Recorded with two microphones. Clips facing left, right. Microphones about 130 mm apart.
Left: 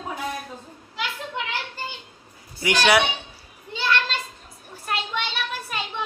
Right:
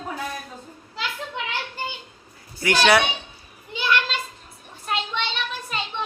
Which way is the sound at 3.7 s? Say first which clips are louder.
Right 1 dB; 15° right (ahead or behind).